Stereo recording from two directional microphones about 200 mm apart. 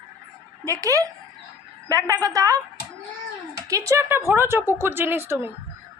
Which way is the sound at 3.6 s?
15° right (ahead or behind).